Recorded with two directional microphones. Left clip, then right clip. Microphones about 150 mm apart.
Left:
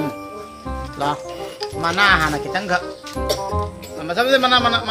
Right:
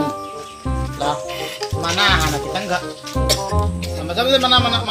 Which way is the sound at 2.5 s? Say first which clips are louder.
Left 1 dB; 5° right (ahead or behind).